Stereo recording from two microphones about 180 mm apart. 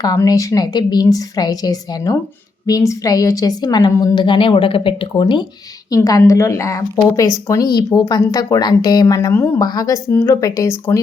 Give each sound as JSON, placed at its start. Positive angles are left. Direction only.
{"t": 0.0, "sound": "a woman's voice", "side_deg": 20}